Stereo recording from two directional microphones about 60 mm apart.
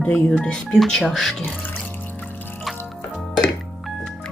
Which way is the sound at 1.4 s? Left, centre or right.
Left.